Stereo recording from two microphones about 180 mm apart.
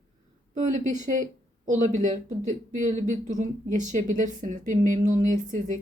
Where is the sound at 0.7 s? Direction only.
40° right (ahead or behind).